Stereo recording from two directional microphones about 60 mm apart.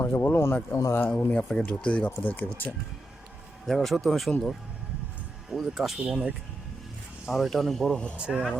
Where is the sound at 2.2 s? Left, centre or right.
Left.